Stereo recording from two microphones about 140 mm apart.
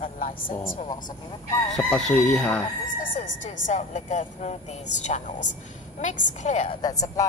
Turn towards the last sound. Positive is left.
turn(degrees=25)  # may be behind; listen again after turning